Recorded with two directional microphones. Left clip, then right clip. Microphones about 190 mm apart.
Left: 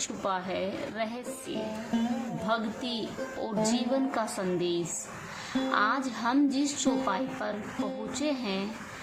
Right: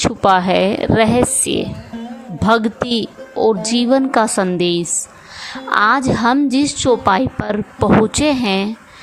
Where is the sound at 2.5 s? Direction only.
50° right (ahead or behind).